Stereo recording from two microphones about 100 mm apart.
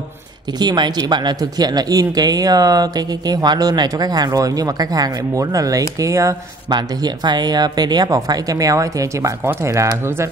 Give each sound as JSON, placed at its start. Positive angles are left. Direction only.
{"t": 0.6, "sound": "speech", "side_deg": -45}
{"t": 6.7, "sound": "speech", "side_deg": -45}